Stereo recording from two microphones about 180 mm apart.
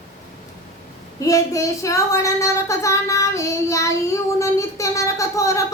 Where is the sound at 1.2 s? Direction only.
20° left (ahead or behind).